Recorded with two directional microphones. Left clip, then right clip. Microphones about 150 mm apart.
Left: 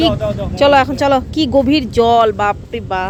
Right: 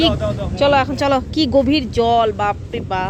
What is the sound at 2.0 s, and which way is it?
Speech, 35° left (ahead or behind).